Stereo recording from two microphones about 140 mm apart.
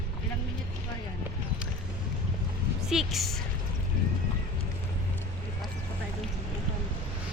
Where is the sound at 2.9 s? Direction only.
Centre (ahead or behind).